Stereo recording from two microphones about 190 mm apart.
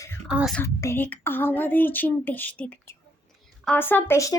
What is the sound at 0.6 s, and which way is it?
Speech, 15° left (ahead or behind).